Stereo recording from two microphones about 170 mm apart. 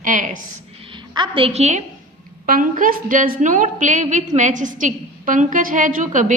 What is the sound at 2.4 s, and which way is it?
A woman's voice, 55° right (ahead or behind).